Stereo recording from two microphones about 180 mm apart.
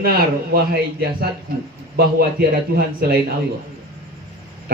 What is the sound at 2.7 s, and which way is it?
Speech, 55° right (ahead or behind).